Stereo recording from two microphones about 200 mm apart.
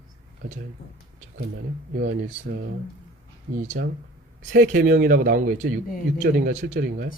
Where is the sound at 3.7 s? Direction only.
45° right (ahead or behind).